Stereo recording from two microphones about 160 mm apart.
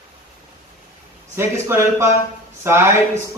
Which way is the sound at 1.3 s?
15° right (ahead or behind).